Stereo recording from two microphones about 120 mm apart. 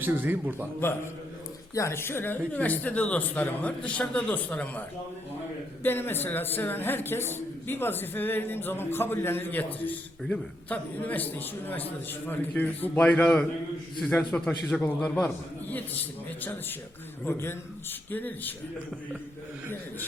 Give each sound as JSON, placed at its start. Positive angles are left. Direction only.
{"t": 0.0, "sound": "a man's voice", "side_deg": -15}
{"t": 1.7, "sound": "a man's voice", "side_deg": 25}
{"t": 5.8, "sound": "a man's voice", "side_deg": 20}
{"t": 16.4, "sound": "a man's voice", "side_deg": 15}